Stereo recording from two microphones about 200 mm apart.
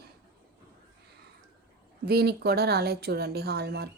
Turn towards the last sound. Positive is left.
turn(degrees=-55)  # may be behind; listen again after turning